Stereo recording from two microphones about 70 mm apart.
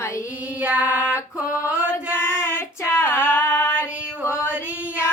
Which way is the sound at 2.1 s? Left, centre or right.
Left.